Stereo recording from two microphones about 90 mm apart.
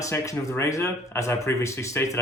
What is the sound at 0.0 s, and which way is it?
Speech, 35° left (ahead or behind).